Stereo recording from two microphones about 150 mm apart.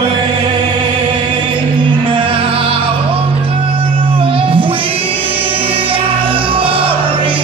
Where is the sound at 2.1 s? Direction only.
35° right (ahead or behind).